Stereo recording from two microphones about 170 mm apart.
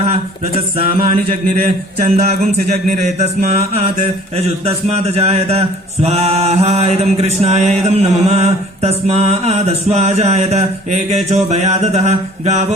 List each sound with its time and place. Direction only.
1.0 s mantra: 40° right (ahead or behind)